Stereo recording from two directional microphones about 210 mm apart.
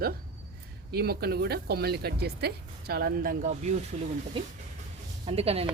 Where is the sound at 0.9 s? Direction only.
50° right (ahead or behind).